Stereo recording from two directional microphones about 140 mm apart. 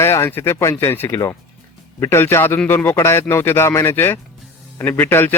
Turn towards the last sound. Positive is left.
turn(degrees=15)  # may be behind; listen again after turning